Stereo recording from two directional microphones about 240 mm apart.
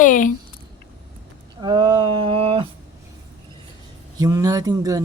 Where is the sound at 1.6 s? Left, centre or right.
Centre.